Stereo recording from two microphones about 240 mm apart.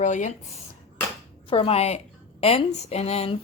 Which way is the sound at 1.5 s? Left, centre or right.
Left.